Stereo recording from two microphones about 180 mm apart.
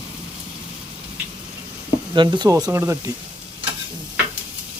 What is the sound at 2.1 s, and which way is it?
Speech, 25° right (ahead or behind).